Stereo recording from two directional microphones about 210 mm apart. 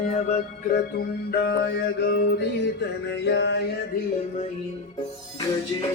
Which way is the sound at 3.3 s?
55° left (ahead or behind).